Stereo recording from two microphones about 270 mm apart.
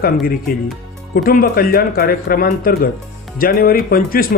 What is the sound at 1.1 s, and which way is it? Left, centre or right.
Speech, left.